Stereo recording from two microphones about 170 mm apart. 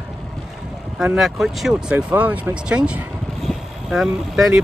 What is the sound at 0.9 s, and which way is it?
Speech, 5° right (ahead or behind).